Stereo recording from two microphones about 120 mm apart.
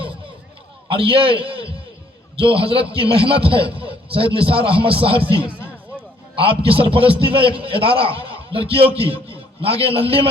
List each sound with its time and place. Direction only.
0.9 s a man's voice: 45° right (ahead or behind)
3.8 s a sound: 50° right (ahead or behind)
4.4 s a man's voice: 50° right (ahead or behind)
6.3 s a man's voice: 50° right (ahead or behind)